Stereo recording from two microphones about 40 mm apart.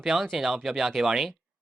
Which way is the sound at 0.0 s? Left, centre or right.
Centre.